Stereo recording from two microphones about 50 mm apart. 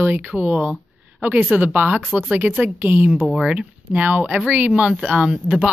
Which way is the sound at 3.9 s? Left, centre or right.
Right.